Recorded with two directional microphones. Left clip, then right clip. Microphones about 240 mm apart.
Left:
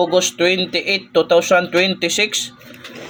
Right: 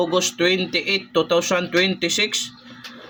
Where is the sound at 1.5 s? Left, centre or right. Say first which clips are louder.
Left 5 dB; centre.